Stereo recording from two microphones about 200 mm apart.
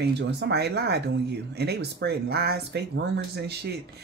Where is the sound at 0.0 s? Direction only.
55° right (ahead or behind).